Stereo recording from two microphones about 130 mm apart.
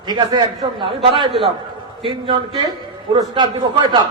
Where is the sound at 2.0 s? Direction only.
40° right (ahead or behind).